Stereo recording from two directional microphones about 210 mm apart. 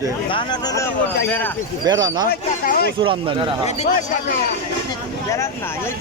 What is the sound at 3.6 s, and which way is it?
Speech, 30° left (ahead or behind).